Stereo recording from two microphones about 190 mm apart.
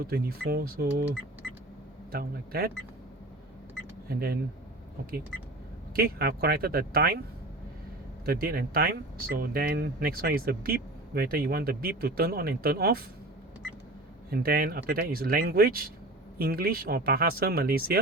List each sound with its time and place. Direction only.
0.0 s speech: 50° right (ahead or behind)
2.1 s speech: 50° right (ahead or behind)
4.1 s speech: 50° right (ahead or behind)
6.0 s speech: 50° right (ahead or behind)
8.2 s speech: 50° right (ahead or behind)
14.3 s speech: 50° right (ahead or behind)